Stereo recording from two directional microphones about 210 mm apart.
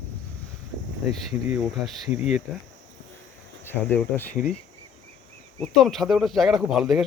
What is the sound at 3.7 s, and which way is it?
Speech, 10° left (ahead or behind).